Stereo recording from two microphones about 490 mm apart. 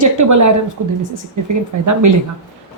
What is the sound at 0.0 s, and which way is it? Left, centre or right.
Speech, right.